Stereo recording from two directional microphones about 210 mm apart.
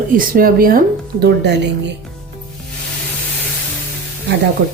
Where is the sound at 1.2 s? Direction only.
55° right (ahead or behind).